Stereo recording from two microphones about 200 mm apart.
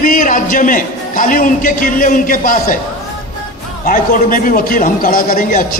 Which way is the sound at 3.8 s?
45° left (ahead or behind).